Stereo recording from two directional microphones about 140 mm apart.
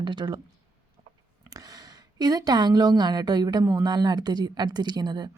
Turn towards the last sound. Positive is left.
turn(degrees=-30)  # may be behind; listen again after turning